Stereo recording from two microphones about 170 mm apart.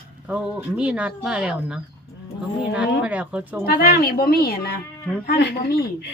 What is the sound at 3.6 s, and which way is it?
A woman's voice, 65° left (ahead or behind).